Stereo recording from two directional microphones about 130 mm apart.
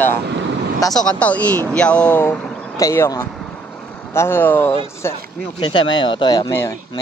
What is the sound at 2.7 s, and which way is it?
Speech, 25° left (ahead or behind).